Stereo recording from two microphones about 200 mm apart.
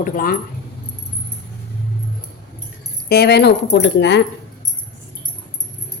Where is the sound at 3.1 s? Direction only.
55° left (ahead or behind).